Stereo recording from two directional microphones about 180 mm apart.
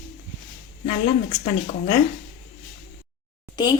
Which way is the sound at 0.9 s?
40° left (ahead or behind).